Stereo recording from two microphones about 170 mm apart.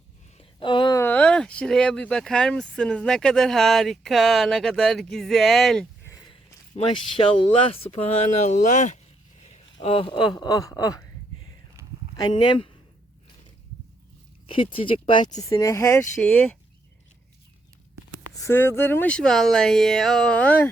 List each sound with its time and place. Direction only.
0.3 s a sound: 30° left (ahead or behind)
1.0 s speech: 5° left (ahead or behind)
6.1 s a sound: 20° left (ahead or behind)
6.7 s speech: 30° left (ahead or behind); by 9.0 s 45° left (ahead or behind)
9.5 s speech: 35° left (ahead or behind)
11.8 s a sound: 20° right (ahead or behind)
12.1 s speech: 25° left (ahead or behind)
14.4 s speech: 30° left (ahead or behind)
15.4 s speech: 20° left (ahead or behind)
16.2 s speech: 5° left (ahead or behind)
18.4 s speech: 15° left (ahead or behind)